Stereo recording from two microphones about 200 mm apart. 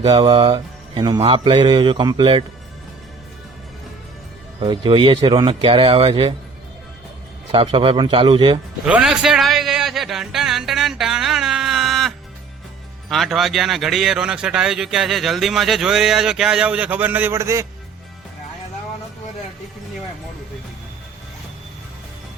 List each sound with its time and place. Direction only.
0.0 s mantra: 25° right (ahead or behind)
4.6 s mantra: 25° right (ahead or behind)
7.5 s mantra: 25° right (ahead or behind)
8.9 s a sound: 5° right (ahead or behind)
13.1 s speech: centre (ahead or behind)